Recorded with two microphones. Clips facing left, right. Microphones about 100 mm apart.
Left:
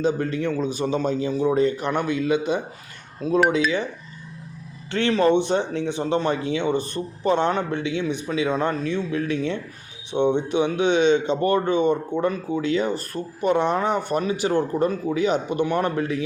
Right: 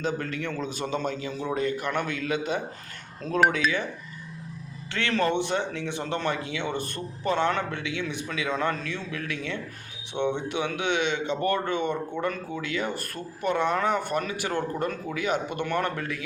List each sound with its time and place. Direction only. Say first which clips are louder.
0.0 s speech: left 7 dB; 25° left (ahead or behind)
0.5 s speech: left 7 dB; 15° left (ahead or behind)
1.0 s speech: left 8 dB; 25° left (ahead or behind)
1.9 s speech: left 6 dB; 20° left (ahead or behind)
3.2 s speech: left 7 dB; 10° left (ahead or behind)
3.5 s speech: left 5 dB; 20° left (ahead or behind)
4.9 s speech: left 7 dB; 30° left (ahead or behind)
5.9 s speech: left 7 dB; 20° left (ahead or behind)
16.0 s speech: left 8 dB; 25° left (ahead or behind)